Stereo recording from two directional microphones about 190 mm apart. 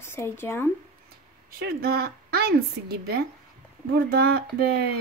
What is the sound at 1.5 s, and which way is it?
A woman's voice, 55° right (ahead or behind).